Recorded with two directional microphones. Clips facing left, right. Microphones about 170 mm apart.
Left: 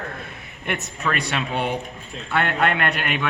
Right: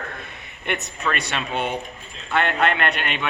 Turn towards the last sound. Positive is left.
turn(degrees=5)  # may be behind; listen again after turning